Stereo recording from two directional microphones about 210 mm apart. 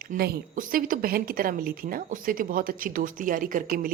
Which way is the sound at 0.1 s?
45° right (ahead or behind).